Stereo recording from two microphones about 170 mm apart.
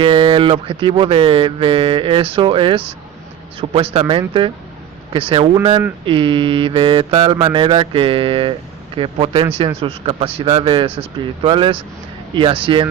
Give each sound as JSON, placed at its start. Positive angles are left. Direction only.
{"t": 0.0, "sound": "speech", "side_deg": -30}